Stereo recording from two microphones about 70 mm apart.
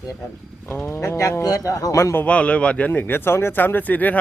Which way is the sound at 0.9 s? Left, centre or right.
Left.